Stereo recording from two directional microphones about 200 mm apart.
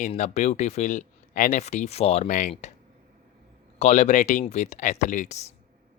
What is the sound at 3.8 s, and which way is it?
Speech, 35° left (ahead or behind).